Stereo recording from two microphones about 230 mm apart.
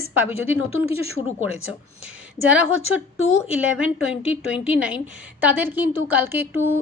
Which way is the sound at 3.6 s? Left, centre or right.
Centre.